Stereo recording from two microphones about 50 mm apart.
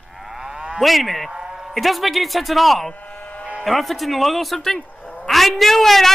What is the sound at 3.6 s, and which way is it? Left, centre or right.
A man's voice, centre.